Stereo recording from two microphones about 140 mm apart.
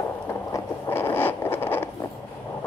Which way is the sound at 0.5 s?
15° left (ahead or behind).